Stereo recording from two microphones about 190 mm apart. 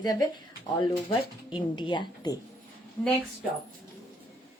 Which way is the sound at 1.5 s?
25° left (ahead or behind).